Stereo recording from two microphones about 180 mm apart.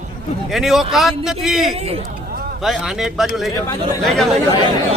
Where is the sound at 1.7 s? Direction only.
35° right (ahead or behind).